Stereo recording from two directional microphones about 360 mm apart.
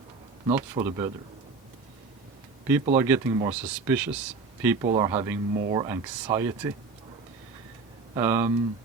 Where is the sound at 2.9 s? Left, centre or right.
Centre.